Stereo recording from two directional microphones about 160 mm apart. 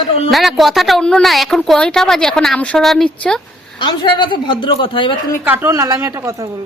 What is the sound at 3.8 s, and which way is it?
Speech, 30° left (ahead or behind).